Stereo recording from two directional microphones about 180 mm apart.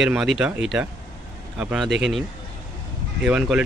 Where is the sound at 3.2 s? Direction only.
5° right (ahead or behind).